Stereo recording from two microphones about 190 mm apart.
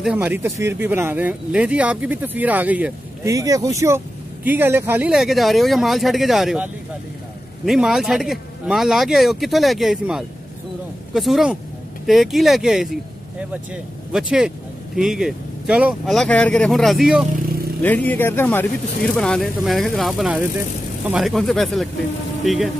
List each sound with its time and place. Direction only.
0.0 s speech: 10° right (ahead or behind)
14.1 s speech: 5° right (ahead or behind)
17.8 s speech: 10° left (ahead or behind)